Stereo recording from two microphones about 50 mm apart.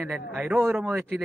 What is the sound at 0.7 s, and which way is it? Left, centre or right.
Speech, centre.